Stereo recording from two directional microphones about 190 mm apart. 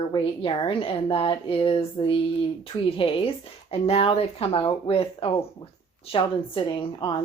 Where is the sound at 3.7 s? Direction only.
30° left (ahead or behind).